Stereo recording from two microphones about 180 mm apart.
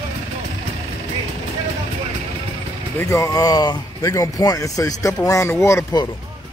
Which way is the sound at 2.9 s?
15° left (ahead or behind).